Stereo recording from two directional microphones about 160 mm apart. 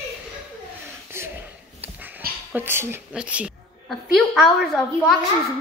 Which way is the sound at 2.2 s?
70° right (ahead or behind).